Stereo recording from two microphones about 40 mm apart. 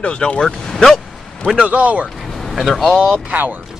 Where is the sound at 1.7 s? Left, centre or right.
Right.